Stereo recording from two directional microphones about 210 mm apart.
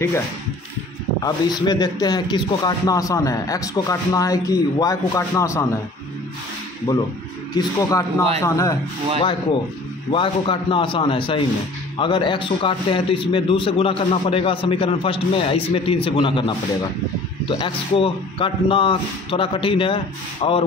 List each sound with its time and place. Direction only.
1.2 s speech: 20° left (ahead or behind)
6.9 s speech: 15° left (ahead or behind)
10.1 s a man's voice: 25° left (ahead or behind)